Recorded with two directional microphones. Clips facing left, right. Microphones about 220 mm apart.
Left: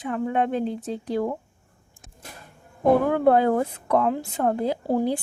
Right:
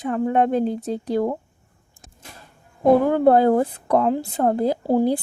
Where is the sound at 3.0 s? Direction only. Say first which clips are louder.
Right 3 dB; 35° right (ahead or behind).